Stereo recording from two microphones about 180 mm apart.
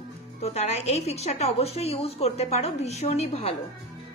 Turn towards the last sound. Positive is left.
turn(degrees=35)  # may be behind; listen again after turning